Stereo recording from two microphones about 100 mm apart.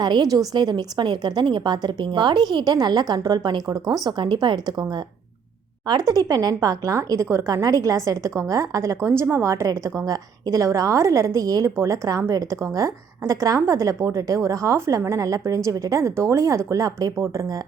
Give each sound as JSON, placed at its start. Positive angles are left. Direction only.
{"t": 0.0, "sound": "a woman's voice", "side_deg": -45}